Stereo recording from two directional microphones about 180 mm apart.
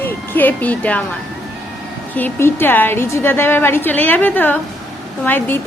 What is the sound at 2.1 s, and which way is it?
A woman's voice, 10° left (ahead or behind).